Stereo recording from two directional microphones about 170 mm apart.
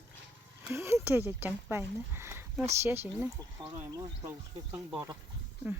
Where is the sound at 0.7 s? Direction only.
15° right (ahead or behind).